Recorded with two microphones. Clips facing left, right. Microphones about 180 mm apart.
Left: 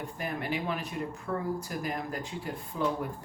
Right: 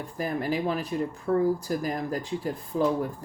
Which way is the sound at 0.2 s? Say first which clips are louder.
Right 7 dB; 35° right (ahead or behind).